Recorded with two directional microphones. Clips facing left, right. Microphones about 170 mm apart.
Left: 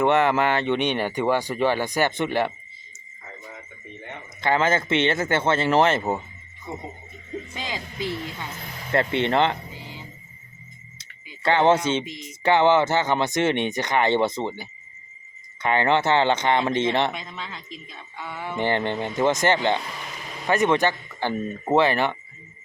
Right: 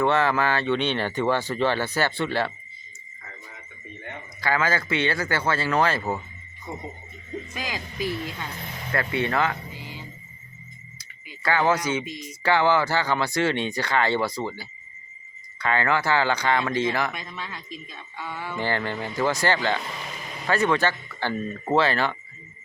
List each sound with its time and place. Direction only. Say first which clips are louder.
0.0 s speech: left 2 dB; 20° left (ahead or behind)
4.4 s speech: left 3 dB; 25° left (ahead or behind)
7.5 s speech: even; 25° left (ahead or behind)
11.4 s speech: left 4 dB; 25° left (ahead or behind)